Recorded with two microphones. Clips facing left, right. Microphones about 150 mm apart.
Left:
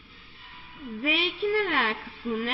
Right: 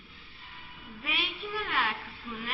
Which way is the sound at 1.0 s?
85° left.